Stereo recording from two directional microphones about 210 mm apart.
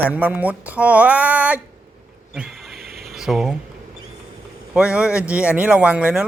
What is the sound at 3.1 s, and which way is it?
Speech, centre (ahead or behind).